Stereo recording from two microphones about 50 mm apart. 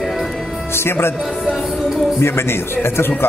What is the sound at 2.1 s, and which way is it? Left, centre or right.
Speech, left.